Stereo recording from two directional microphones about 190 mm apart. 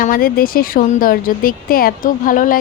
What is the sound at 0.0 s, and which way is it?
A woman's voice, 50° left (ahead or behind).